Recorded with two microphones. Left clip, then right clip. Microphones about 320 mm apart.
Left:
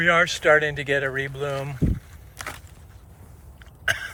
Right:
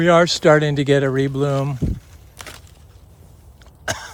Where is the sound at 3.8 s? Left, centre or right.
Centre.